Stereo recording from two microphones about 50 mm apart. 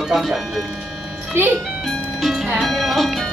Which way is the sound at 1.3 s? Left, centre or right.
Right.